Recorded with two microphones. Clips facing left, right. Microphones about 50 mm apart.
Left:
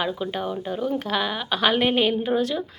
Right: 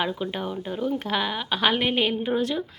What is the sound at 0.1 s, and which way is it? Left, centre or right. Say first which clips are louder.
Speech: left 2 dB; centre.